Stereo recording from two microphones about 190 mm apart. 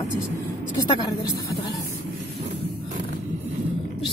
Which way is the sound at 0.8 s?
25° left (ahead or behind).